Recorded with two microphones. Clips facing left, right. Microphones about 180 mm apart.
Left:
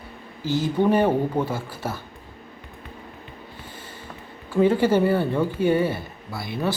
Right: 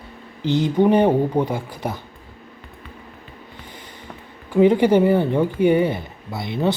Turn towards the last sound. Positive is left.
turn(degrees=-20)  # may be behind; listen again after turning